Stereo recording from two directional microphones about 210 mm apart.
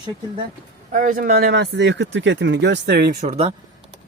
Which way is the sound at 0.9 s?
40° right (ahead or behind).